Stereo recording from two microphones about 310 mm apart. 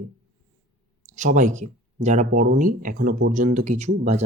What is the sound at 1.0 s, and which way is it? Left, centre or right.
Speech, right.